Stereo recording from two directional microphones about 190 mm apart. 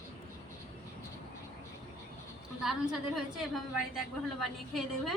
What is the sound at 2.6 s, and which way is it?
A woman's voice, centre (ahead or behind).